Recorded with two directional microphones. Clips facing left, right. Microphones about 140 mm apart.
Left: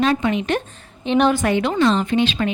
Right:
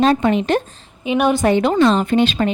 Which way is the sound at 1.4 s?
35° right (ahead or behind).